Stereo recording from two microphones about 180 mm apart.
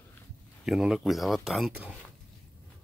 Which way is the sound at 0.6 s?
Centre (ahead or behind).